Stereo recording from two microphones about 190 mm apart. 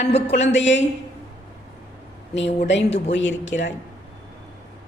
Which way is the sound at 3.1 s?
75° left (ahead or behind).